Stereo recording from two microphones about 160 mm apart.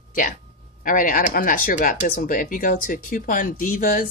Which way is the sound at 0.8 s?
60° left (ahead or behind).